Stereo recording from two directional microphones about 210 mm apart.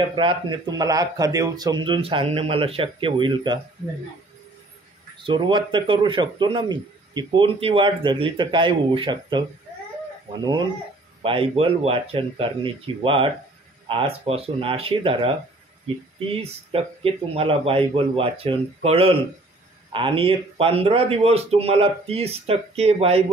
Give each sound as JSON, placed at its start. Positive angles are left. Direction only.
{"t": 0.1, "sound": "a man's voice", "side_deg": -20}
{"t": 5.2, "sound": "a man's voice", "side_deg": -25}
{"t": 11.2, "sound": "a man's voice", "side_deg": -25}
{"t": 16.7, "sound": "a man's voice", "side_deg": -25}